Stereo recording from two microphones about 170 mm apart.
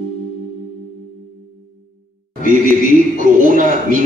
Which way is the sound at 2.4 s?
55° right (ahead or behind).